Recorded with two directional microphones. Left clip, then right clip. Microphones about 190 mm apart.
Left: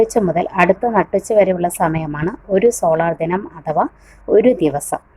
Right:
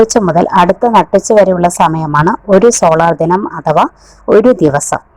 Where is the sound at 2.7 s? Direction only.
20° right (ahead or behind).